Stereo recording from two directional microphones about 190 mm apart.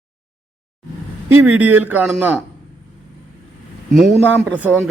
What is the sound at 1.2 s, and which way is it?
Speech, 10° right (ahead or behind).